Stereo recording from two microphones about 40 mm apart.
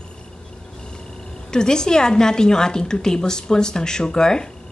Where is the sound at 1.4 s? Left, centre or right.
Centre.